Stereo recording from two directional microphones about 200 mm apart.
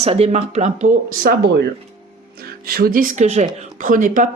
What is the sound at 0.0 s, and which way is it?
A woman's voice, 30° right (ahead or behind).